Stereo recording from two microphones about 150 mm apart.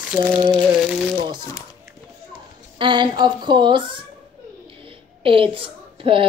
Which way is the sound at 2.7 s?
30° right (ahead or behind).